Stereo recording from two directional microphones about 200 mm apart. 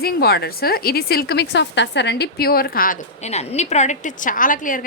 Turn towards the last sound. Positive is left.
turn(degrees=45)  # may be behind; listen again after turning